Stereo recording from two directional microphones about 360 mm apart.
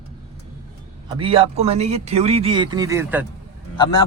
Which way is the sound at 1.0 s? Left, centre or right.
Centre.